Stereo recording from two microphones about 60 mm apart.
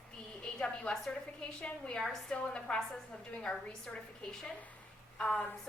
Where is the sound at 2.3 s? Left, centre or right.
Centre.